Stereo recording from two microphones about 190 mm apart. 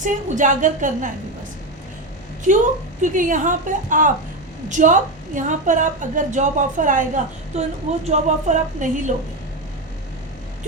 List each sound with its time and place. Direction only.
0.0 s a woman's voice: 40° right (ahead or behind)
3.0 s a woman's voice: 45° right (ahead or behind)